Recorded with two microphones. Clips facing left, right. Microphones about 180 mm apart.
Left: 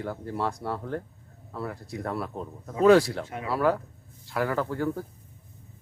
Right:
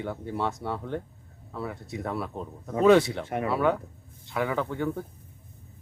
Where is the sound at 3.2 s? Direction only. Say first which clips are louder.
Right 6 dB; 60° right (ahead or behind).